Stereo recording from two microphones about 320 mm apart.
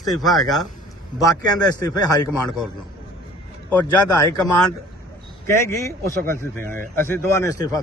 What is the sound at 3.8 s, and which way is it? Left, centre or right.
A man's voice, centre.